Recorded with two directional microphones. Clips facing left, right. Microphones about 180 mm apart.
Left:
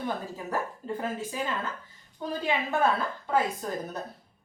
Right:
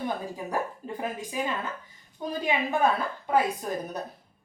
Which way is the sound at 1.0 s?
15° right (ahead or behind).